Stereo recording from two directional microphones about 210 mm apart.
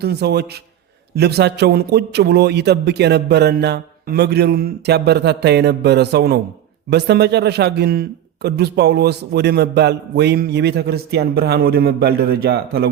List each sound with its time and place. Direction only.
0.0 s a man's voice: 50° right (ahead or behind)